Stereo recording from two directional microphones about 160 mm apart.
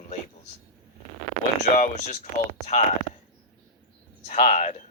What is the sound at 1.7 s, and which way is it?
Speech, 50° left (ahead or behind).